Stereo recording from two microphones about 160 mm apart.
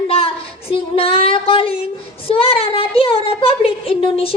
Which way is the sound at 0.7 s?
35° left (ahead or behind).